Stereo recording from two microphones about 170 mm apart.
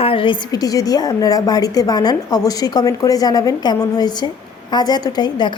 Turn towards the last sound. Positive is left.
turn(degrees=25)  # may be behind; listen again after turning